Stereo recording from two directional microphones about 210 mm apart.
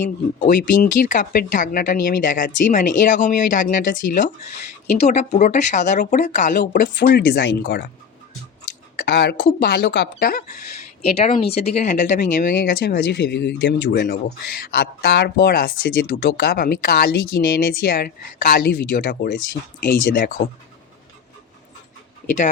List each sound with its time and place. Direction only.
0.0 s speech: 40° left (ahead or behind); by 7.9 s 55° left (ahead or behind)
9.0 s speech: 50° left (ahead or behind)
11.3 s speech: 30° left (ahead or behind)
12.5 s speech: 50° left (ahead or behind)